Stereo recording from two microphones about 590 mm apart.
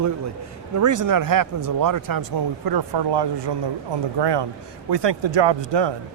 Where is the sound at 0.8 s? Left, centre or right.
Right.